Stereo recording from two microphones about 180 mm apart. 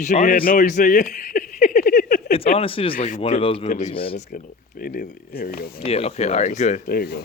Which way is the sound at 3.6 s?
45° left (ahead or behind).